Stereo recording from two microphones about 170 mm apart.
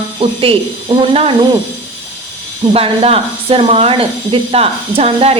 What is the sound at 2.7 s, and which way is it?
A woman's voice, 35° right (ahead or behind).